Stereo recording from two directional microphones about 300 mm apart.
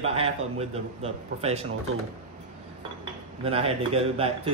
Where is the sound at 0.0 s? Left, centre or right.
Centre.